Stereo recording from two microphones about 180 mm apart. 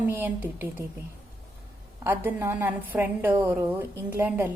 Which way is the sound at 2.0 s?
10° right (ahead or behind).